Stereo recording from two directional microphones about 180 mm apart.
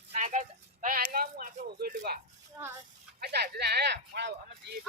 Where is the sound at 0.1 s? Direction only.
40° right (ahead or behind); by 2.2 s 60° right (ahead or behind).